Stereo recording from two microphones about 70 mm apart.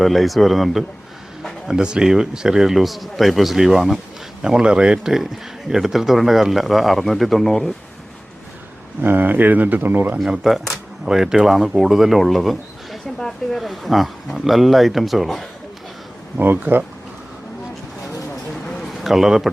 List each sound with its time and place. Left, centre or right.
0.0 s speech: centre
1.6 s speech: centre
9.0 s speech: right
10.2 s speech: centre
16.4 s speech: right
18.5 s a sound: centre